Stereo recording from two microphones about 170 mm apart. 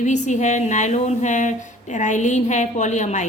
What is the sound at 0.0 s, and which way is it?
Speech, 45° left (ahead or behind).